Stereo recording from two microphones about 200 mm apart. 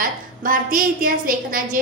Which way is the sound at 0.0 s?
45° right (ahead or behind).